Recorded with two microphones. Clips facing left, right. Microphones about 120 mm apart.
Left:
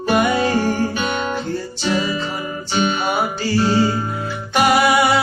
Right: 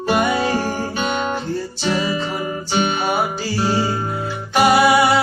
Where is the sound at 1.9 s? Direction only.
30° right (ahead or behind).